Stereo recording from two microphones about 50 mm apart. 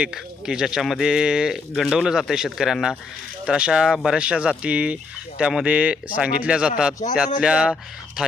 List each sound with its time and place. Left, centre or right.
0.1 s speech: centre
4.2 s speech: right